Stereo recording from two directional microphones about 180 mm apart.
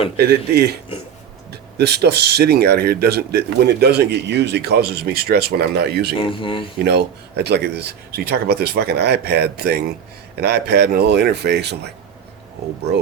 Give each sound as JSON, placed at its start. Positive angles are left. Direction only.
{"t": 0.2, "sound": "speech", "side_deg": -65}
{"t": 1.8, "sound": "speech", "side_deg": -65}
{"t": 6.2, "sound": "speech", "side_deg": 30}
{"t": 6.8, "sound": "a man's voice", "side_deg": -65}